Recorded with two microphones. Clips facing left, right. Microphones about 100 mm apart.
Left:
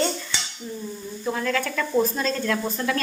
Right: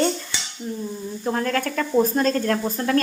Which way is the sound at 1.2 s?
45° right (ahead or behind).